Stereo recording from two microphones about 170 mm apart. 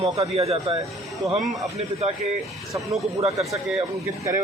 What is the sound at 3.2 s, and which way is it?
Speech, 35° right (ahead or behind).